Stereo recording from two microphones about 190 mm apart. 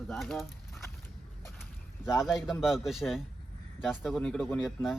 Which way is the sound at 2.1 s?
Centre (ahead or behind).